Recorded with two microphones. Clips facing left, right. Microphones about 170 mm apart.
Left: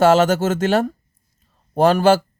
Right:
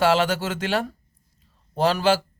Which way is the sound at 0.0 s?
45° left (ahead or behind).